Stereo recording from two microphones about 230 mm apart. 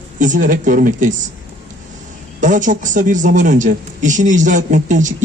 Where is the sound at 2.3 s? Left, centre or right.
Right.